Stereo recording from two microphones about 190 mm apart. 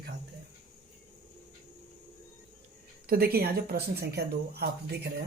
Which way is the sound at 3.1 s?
55° right (ahead or behind).